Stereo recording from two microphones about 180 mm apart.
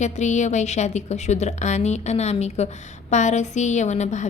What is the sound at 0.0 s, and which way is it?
A woman's voice, 40° left (ahead or behind).